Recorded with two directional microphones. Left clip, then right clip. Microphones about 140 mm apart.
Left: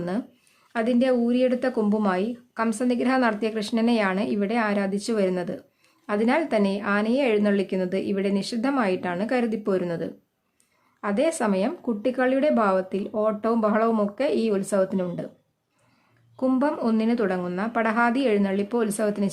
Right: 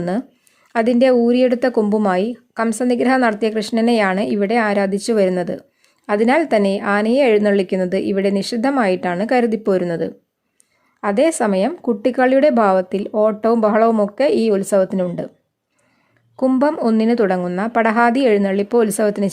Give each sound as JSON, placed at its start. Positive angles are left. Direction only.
{"t": 0.0, "sound": "a woman's voice", "side_deg": -45}
{"t": 16.4, "sound": "a woman's voice", "side_deg": -40}